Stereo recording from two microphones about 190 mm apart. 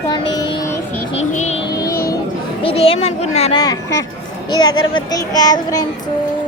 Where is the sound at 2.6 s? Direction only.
30° left (ahead or behind).